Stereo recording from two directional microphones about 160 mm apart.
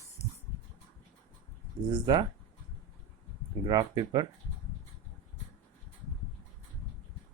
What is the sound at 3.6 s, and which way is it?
Speech, 25° right (ahead or behind).